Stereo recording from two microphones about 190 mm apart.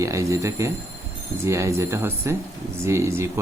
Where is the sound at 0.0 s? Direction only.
15° right (ahead or behind).